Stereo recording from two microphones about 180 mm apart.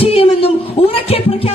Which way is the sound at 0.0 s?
30° left (ahead or behind).